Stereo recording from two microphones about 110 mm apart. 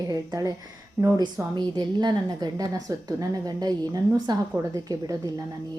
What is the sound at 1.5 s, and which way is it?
A woman's voice, 40° right (ahead or behind).